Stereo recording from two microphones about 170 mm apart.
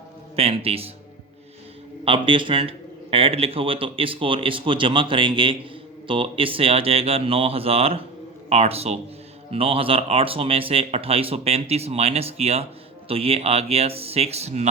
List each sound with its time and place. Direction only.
0.3 s speech: 35° right (ahead or behind)
2.0 s speech: 30° right (ahead or behind)